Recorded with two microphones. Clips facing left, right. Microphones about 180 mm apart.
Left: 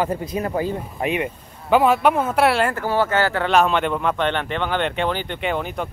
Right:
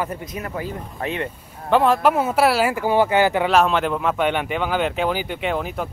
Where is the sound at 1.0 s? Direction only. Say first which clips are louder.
Left 3 dB; 15° left (ahead or behind).